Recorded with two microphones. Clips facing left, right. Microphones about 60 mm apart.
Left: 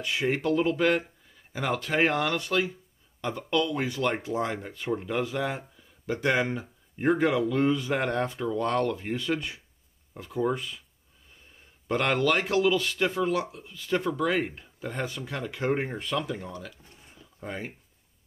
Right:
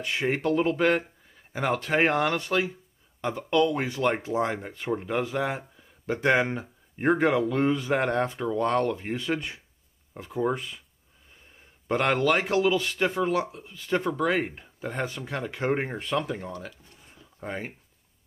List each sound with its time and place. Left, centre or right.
0.0 s speech: right
6.1 s speech: right
11.9 s speech: right